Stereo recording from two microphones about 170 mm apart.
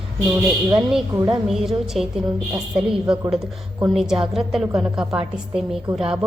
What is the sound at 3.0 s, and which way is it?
Speech, 25° right (ahead or behind).